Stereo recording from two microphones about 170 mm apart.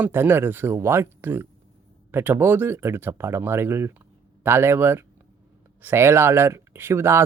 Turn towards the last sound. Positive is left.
turn(degrees=-15)  # may be behind; listen again after turning